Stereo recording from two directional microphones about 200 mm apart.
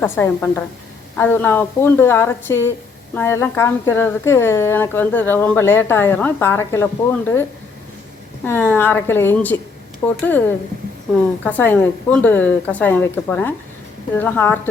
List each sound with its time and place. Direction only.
0.0 s speech: 10° left (ahead or behind)
8.4 s speech: 10° left (ahead or behind)
11.4 s speech: 10° left (ahead or behind)